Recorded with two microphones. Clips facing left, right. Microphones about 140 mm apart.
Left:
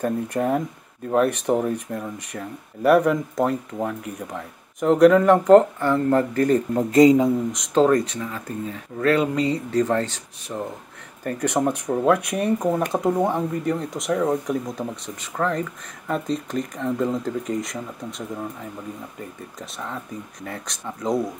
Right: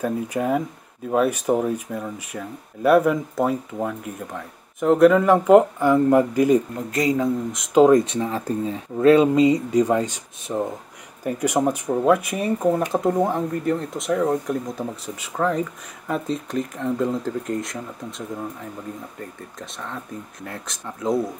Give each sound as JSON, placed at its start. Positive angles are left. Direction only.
{"t": 0.0, "sound": "speech", "side_deg": 0}
{"t": 6.9, "sound": "a man's voice", "side_deg": 25}
{"t": 7.5, "sound": "speech", "side_deg": 0}
{"t": 8.1, "sound": "speech", "side_deg": -30}